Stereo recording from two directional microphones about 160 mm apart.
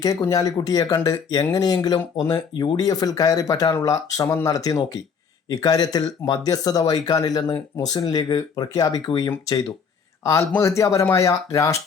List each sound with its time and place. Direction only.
0.0 s speech: 25° left (ahead or behind)